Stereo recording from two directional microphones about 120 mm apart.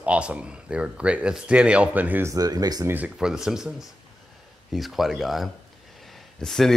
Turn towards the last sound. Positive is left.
turn(degrees=5)  # may be behind; listen again after turning